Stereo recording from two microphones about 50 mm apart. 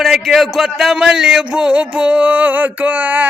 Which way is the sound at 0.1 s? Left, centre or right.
Centre.